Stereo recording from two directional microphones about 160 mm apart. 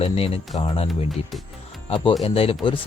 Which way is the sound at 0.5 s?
30° left (ahead or behind).